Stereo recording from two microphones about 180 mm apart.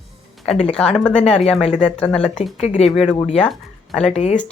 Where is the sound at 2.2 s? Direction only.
35° left (ahead or behind).